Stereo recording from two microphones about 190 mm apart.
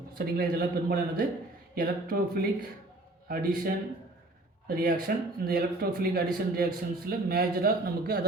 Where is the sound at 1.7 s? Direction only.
50° right (ahead or behind).